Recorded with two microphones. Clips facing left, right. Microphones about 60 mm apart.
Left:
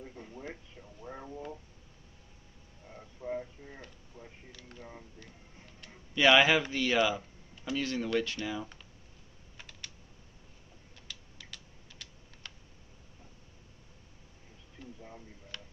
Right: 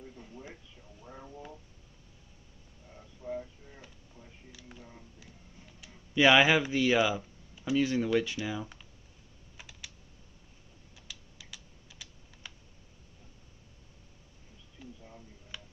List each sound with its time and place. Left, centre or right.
0.0 s a sound: left
2.9 s a sound: left
4.5 s camera: centre
5.2 s music: left
6.1 s speech: centre
9.6 s computer keyboard: centre
11.0 s typing: centre
14.8 s a sound: centre
15.5 s tick-tock: centre